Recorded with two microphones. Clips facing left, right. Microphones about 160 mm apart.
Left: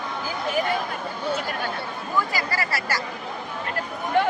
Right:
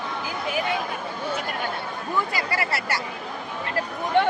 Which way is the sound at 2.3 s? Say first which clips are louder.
Even; 25° right (ahead or behind).